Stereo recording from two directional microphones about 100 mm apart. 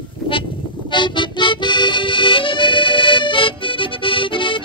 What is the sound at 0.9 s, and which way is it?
Accordion, 55° left (ahead or behind).